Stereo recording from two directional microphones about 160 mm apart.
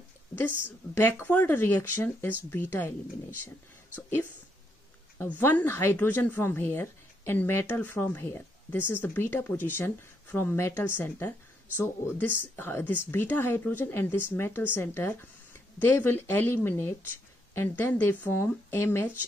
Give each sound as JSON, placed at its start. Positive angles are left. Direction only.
{"t": 0.7, "sound": "speech", "side_deg": 15}
{"t": 5.4, "sound": "speech", "side_deg": 15}